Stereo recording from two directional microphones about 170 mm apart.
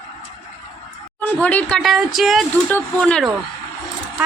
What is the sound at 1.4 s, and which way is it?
A woman's voice, 10° left (ahead or behind).